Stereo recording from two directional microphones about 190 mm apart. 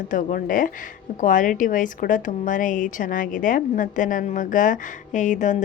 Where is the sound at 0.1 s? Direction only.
45° left (ahead or behind).